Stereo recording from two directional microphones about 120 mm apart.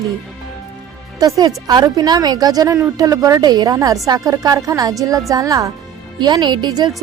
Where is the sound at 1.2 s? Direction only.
30° right (ahead or behind).